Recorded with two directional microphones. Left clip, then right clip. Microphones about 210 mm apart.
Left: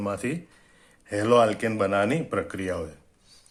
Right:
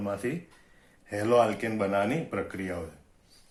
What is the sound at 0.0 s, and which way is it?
Speech, 40° left (ahead or behind).